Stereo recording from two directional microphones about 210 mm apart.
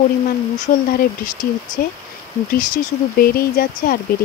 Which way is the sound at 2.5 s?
45° left (ahead or behind).